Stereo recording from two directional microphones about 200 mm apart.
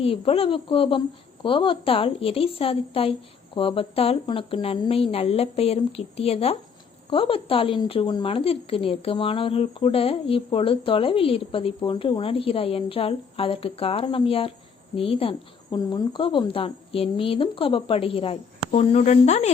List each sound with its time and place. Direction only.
0.0 s a woman's voice: 30° left (ahead or behind)